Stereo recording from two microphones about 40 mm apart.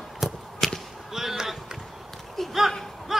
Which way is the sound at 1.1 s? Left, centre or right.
Centre.